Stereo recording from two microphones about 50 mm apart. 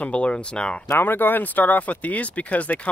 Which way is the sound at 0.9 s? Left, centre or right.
Left.